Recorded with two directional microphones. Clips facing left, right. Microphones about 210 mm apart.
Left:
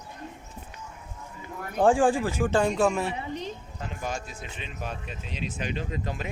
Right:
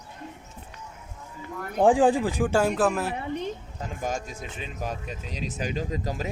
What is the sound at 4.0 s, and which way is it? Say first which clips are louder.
Speech: right 4 dB; 45° right (ahead or behind).